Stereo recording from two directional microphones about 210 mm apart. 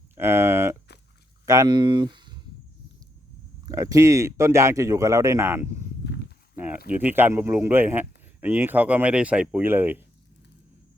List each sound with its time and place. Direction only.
0.2 s a sound: 10° right (ahead or behind)
1.5 s speech: 20° right (ahead or behind)
3.7 s speech: 15° right (ahead or behind)
6.9 s speech: 10° right (ahead or behind)